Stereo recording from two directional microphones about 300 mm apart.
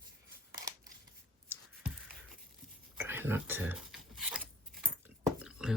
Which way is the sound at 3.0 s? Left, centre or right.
Centre.